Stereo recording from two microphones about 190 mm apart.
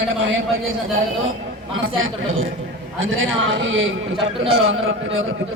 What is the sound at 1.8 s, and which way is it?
A man's voice, 90° right.